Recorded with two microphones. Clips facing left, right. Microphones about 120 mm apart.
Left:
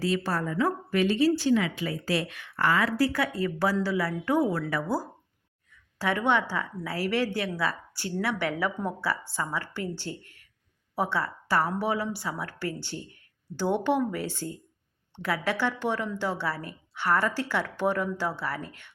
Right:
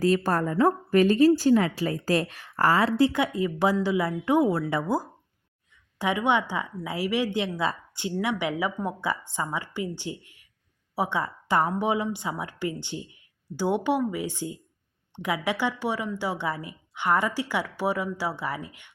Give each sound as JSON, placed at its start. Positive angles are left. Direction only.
{"t": 0.0, "sound": "a woman's voice", "side_deg": -45}